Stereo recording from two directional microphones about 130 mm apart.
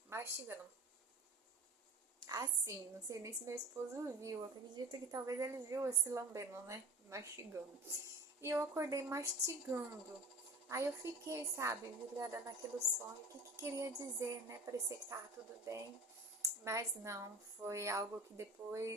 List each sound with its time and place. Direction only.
0.1 s a sound: 20° right (ahead or behind)
2.2 s a woman's voice: 25° right (ahead or behind)
13.6 s a woman's voice: 25° right (ahead or behind)
16.4 s a woman's voice: 25° right (ahead or behind)